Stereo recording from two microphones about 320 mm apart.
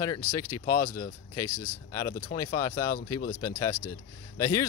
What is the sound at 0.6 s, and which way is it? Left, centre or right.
Speech, left.